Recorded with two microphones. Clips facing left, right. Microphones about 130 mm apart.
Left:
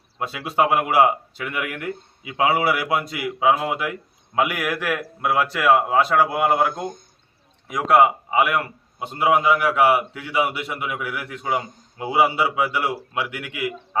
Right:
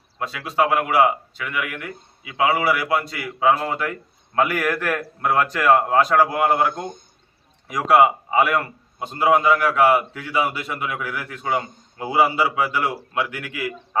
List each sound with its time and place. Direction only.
0.2 s a man's voice: 20° left (ahead or behind); by 8.0 s centre (ahead or behind)
8.0 s a man's voice: 10° left (ahead or behind)